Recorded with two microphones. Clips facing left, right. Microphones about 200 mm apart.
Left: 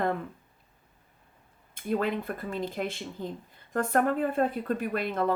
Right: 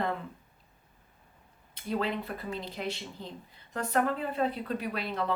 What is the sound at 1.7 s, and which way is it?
Speech, 50° left (ahead or behind).